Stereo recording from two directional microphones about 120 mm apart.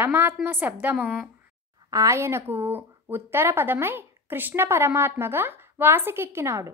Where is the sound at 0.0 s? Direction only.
20° right (ahead or behind).